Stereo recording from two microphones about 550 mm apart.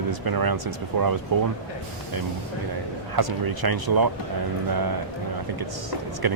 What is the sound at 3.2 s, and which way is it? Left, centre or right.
Speech, right.